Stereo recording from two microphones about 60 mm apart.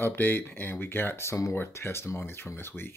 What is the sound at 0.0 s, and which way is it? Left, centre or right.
Speech, left.